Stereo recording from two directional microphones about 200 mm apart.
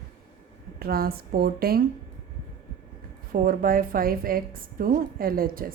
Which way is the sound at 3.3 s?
45° right (ahead or behind).